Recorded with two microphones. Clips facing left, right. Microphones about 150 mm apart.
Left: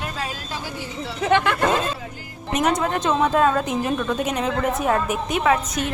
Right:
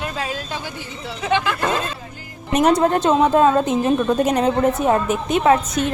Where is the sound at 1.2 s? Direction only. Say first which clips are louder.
Left 1 dB; 55° left (ahead or behind).